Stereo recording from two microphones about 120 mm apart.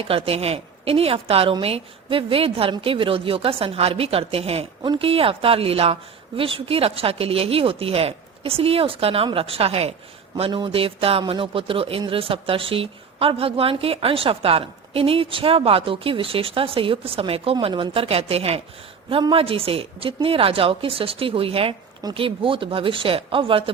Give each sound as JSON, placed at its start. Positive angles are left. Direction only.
{"t": 0.0, "sound": "a woman's voice", "side_deg": -55}